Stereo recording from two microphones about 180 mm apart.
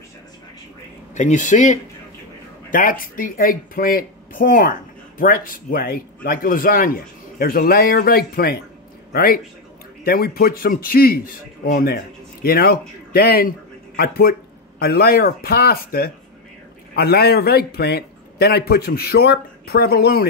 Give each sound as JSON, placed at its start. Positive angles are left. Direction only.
{"t": 1.1, "sound": "speech", "side_deg": 45}
{"t": 2.7, "sound": "a man's voice", "side_deg": 50}